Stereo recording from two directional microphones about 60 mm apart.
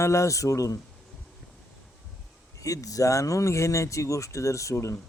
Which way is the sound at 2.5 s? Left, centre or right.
Left.